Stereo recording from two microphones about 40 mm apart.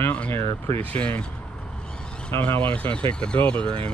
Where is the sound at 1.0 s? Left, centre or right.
Left.